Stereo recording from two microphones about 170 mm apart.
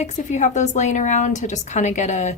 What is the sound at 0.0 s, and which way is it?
A woman's voice, 45° left (ahead or behind).